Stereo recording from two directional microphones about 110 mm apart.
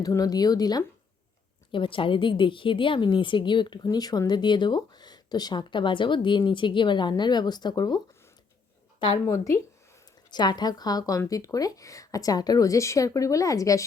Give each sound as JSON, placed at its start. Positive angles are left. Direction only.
{"t": 0.0, "sound": "speech", "side_deg": 35}
{"t": 1.7, "sound": "speech", "side_deg": 50}
{"t": 9.2, "sound": "speech", "side_deg": 25}
{"t": 10.3, "sound": "speech", "side_deg": 40}